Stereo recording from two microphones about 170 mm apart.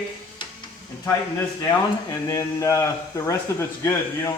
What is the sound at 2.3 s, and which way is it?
Speech, 20° left (ahead or behind).